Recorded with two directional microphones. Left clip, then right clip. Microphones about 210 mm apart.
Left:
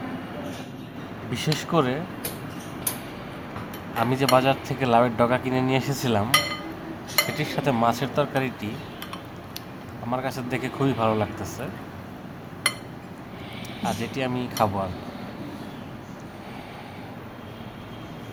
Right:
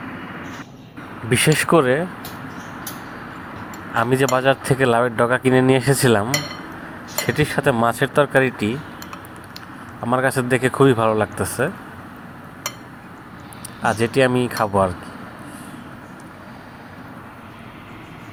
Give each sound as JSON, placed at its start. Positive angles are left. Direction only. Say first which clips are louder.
{"t": 1.3, "sound": "speech", "louder": "right 11 dB", "side_deg": -25}
{"t": 3.9, "sound": "speech", "louder": "right 3 dB", "side_deg": -20}
{"t": 10.1, "sound": "speech", "louder": "right 10 dB", "side_deg": -20}
{"t": 13.8, "sound": "speech", "louder": "right 11 dB", "side_deg": -20}